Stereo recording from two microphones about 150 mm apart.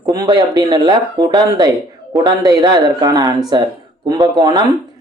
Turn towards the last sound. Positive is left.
turn(degrees=-30)  # may be behind; listen again after turning